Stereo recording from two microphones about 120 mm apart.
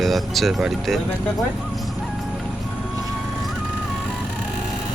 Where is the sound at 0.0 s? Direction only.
Centre (ahead or behind).